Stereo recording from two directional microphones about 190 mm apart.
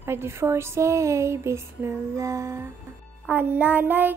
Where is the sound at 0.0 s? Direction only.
15° right (ahead or behind).